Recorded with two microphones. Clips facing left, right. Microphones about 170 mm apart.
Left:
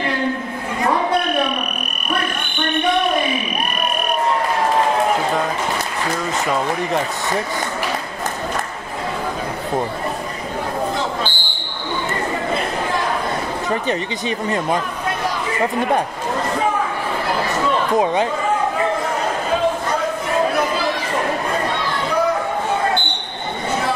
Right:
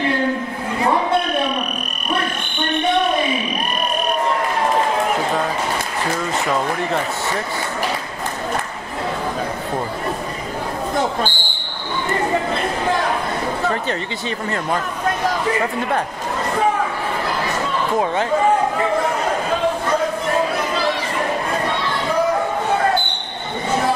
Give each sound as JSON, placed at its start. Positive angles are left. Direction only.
{"t": 13.7, "sound": "speech", "side_deg": 15}
{"t": 17.9, "sound": "speech", "side_deg": 20}